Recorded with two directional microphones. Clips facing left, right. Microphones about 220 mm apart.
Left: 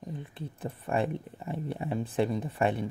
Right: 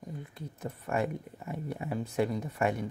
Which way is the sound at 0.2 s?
30° left (ahead or behind).